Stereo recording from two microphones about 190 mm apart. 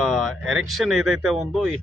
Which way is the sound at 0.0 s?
Centre (ahead or behind).